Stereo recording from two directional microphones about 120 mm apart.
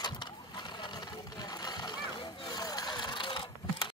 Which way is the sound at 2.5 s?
35° left (ahead or behind).